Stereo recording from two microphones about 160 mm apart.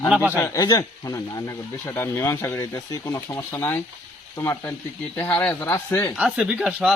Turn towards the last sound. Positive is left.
turn(degrees=-5)  # may be behind; listen again after turning